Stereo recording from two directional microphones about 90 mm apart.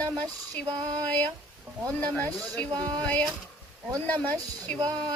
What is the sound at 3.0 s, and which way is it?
Speech, 10° left (ahead or behind).